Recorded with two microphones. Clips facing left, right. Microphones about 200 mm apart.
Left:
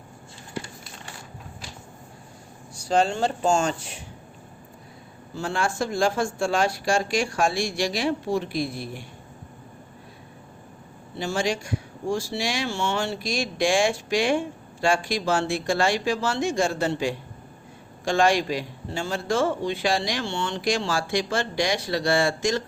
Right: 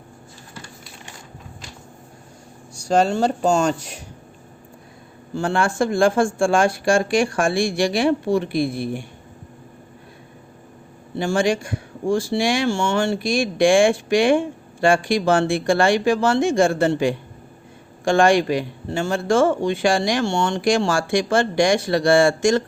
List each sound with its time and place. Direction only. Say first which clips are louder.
2.7 s speech: right 4 dB; 45° right (ahead or behind)
5.3 s speech: right 6 dB; 55° right (ahead or behind)
11.2 s speech: right 6 dB; 55° right (ahead or behind)